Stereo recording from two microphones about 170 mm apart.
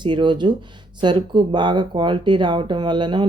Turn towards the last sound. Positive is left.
turn(degrees=-25)  # may be behind; listen again after turning